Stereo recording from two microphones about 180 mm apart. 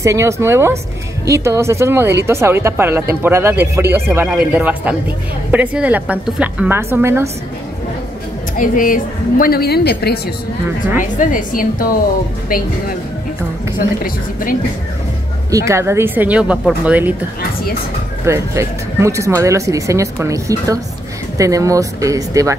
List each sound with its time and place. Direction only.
0.0 s speech: 15° right (ahead or behind)
8.5 s a woman's voice: 50° left (ahead or behind)
11.1 s a woman's voice: 50° left (ahead or behind)
13.7 s a woman's voice: 50° left (ahead or behind)
15.5 s speech: 15° right (ahead or behind)
18.2 s speech: 15° right (ahead or behind)